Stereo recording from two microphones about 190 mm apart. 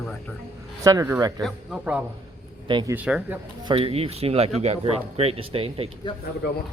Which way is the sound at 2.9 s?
5° right (ahead or behind).